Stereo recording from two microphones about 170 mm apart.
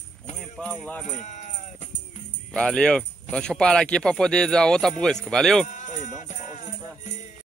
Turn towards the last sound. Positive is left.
turn(degrees=45)  # may be behind; listen again after turning